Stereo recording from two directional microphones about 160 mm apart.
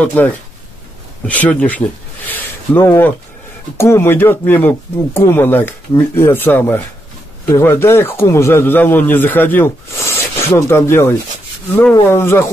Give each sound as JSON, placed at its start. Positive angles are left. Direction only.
{"t": 0.0, "sound": "speech", "side_deg": 10}